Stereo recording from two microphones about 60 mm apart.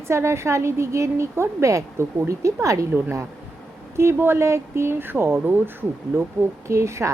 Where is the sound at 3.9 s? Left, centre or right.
Right.